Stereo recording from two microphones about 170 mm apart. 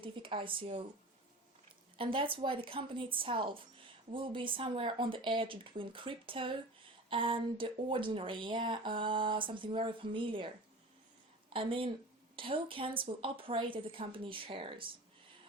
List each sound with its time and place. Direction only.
0.0 s speech: 30° right (ahead or behind)
2.0 s speech: 30° right (ahead or behind)
11.5 s speech: 30° right (ahead or behind)